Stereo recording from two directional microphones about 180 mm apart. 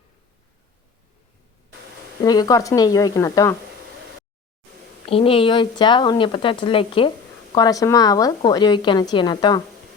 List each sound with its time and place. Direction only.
2.2 s speech: 20° left (ahead or behind)
5.0 s speech: 30° left (ahead or behind)